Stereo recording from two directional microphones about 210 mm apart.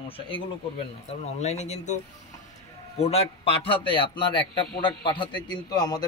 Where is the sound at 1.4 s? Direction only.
30° left (ahead or behind).